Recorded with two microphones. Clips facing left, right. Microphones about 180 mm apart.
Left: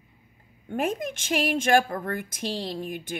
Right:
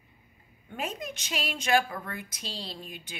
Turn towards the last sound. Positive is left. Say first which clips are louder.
# left 10 dB
turn(degrees=50)  # may be behind; listen again after turning